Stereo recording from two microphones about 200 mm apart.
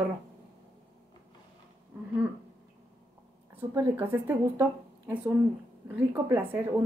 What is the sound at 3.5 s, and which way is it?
A woman's voice, 10° right (ahead or behind).